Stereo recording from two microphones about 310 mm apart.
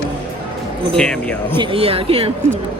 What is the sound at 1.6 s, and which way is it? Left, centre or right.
Speech, centre.